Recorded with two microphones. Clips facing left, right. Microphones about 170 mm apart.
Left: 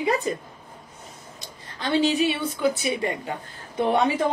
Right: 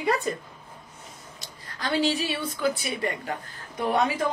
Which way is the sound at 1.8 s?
25° left (ahead or behind).